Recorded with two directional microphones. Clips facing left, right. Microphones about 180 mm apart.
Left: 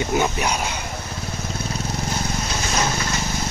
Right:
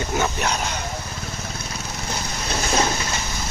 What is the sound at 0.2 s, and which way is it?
Speech, 10° left (ahead or behind).